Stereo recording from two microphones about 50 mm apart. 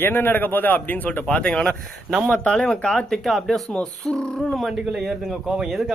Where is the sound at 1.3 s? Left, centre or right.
Left; by 3.6 s centre.